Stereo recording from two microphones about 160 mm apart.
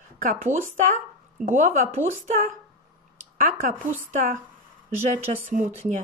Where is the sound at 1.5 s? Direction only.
50° right (ahead or behind).